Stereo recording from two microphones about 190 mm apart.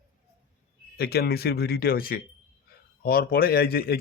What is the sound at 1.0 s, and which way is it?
Speech, 55° left (ahead or behind).